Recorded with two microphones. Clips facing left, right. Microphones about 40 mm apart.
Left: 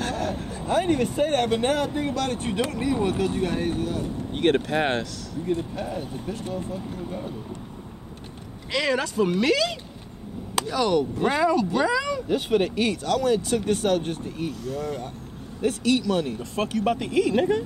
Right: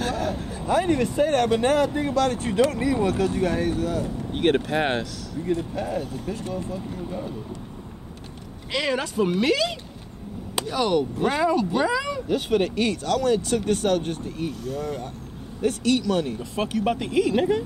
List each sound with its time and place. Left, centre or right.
0.0 s a sound: centre
0.7 s speech: left
2.7 s speech: right
3.0 s speech: left
4.3 s speech: centre
5.9 s speech: left
8.7 s speech: right
11.1 s speech: centre
11.4 s speech: centre
12.3 s speech: centre